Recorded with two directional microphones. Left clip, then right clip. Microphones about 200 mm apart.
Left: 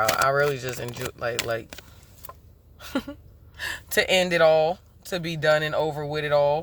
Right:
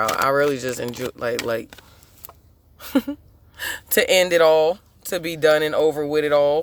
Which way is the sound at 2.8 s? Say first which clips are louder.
Right 8 dB; 45° right (ahead or behind).